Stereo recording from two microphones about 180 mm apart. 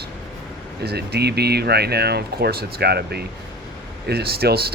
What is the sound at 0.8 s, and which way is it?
Speech, 65° right (ahead or behind).